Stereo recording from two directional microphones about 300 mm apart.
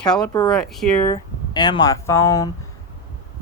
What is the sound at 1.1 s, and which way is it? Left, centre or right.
Speech, centre.